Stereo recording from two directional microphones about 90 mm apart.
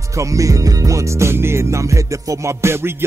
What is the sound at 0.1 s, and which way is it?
Music, 35° right (ahead or behind).